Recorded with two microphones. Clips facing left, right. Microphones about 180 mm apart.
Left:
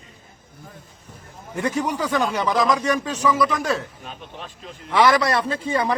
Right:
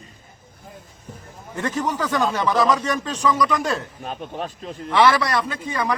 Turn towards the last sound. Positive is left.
turn(degrees=25)  # may be behind; listen again after turning